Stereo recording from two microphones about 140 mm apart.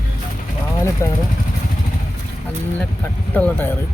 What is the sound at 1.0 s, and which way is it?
Speech, 20° left (ahead or behind).